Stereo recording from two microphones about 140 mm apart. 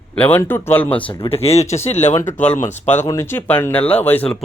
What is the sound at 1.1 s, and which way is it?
Speech, 40° left (ahead or behind).